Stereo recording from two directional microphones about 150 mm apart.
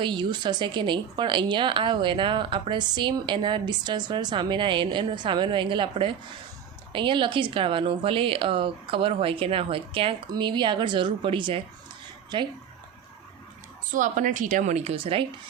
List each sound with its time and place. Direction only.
0.0 s a woman's voice: 30° right (ahead or behind)
13.9 s a woman's voice: 60° right (ahead or behind)
14.9 s a woman's voice: 35° right (ahead or behind)